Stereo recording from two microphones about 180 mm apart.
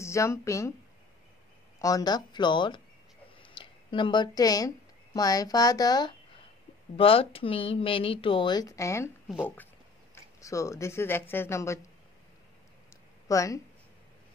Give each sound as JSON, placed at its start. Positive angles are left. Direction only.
{"t": 0.0, "sound": "speech", "side_deg": 15}
{"t": 1.8, "sound": "speech", "side_deg": 20}
{"t": 10.1, "sound": "speech", "side_deg": 15}
{"t": 13.3, "sound": "speech", "side_deg": 20}